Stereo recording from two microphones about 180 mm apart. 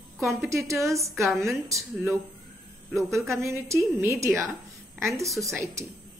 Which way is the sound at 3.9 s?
15° right (ahead or behind).